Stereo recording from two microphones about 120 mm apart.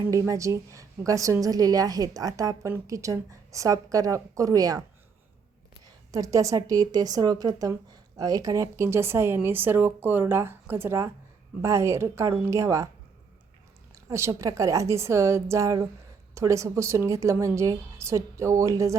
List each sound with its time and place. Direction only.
0.1 s a woman's voice: 25° right (ahead or behind)
6.1 s a woman's voice: 30° right (ahead or behind)
14.1 s a woman's voice: 25° right (ahead or behind)